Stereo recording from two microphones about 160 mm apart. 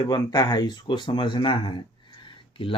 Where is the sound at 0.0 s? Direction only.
25° left (ahead or behind).